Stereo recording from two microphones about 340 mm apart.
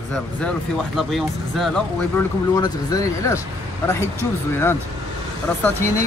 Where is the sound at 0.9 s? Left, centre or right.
Centre.